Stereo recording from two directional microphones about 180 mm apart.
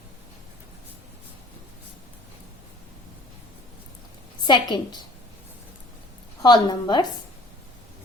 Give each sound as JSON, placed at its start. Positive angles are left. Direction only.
{"t": 4.4, "sound": "a woman's voice", "side_deg": 25}
{"t": 6.4, "sound": "a woman's voice", "side_deg": 25}